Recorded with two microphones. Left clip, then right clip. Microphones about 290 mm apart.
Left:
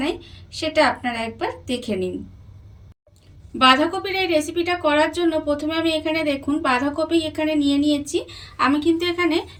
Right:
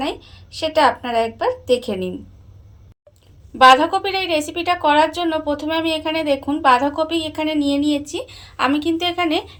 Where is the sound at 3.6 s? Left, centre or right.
Centre.